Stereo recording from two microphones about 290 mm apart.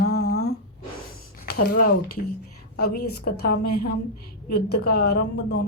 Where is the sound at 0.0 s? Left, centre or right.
Left.